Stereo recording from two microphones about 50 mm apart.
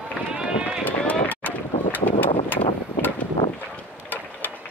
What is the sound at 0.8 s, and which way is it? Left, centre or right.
Run, left.